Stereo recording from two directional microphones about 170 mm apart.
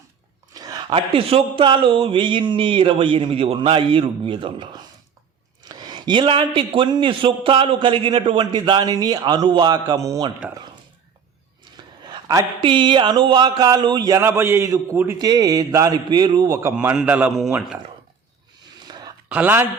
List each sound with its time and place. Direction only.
0.5 s speech: 20° right (ahead or behind)
11.6 s speech: 25° right (ahead or behind)
16.7 s a man's voice: 5° right (ahead or behind)
18.9 s a sound: 25° right (ahead or behind)
19.3 s a man's voice: 10° right (ahead or behind)